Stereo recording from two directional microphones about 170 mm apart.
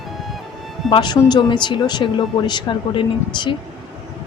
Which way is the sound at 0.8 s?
25° left (ahead or behind).